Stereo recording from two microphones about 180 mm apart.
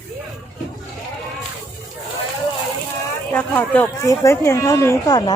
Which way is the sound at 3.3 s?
10° left (ahead or behind).